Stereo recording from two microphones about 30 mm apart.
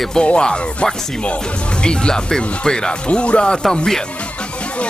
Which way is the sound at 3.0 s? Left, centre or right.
Left.